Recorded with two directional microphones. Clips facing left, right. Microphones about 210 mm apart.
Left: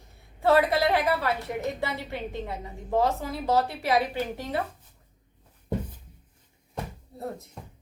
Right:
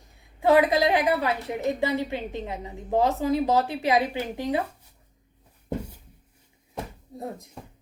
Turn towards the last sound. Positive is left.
turn(degrees=-15)  # may be behind; listen again after turning